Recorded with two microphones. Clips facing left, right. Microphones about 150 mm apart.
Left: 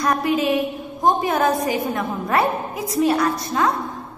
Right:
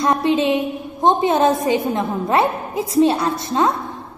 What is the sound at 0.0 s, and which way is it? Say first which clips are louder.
A woman's voice: right 3 dB; 25° right (ahead or behind).